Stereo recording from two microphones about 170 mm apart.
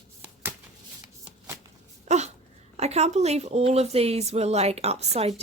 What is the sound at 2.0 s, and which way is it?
Dog, 40° right (ahead or behind).